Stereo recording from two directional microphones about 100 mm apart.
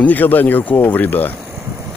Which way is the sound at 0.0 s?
15° left (ahead or behind).